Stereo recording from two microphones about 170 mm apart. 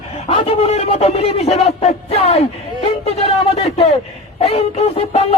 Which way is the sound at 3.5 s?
35° left (ahead or behind).